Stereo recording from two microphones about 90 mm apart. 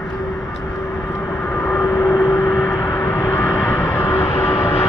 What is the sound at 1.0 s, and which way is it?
Vehicle, 40° left (ahead or behind).